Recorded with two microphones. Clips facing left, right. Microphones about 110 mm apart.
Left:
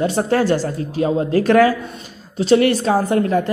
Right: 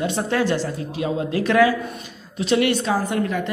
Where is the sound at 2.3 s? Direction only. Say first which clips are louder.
Left 5 dB; 35° left (ahead or behind).